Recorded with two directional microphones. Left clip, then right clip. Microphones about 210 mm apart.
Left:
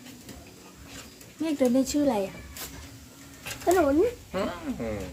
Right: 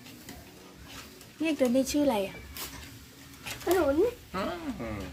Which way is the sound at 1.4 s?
Centre (ahead or behind).